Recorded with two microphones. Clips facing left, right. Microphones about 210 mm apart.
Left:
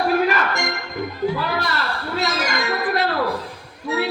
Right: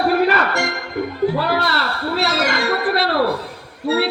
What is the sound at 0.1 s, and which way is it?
Music, 70° right (ahead or behind).